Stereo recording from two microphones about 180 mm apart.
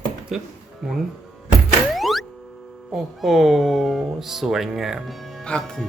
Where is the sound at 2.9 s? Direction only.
Centre (ahead or behind).